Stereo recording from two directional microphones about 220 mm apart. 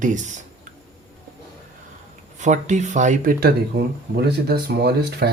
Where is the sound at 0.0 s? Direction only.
35° right (ahead or behind).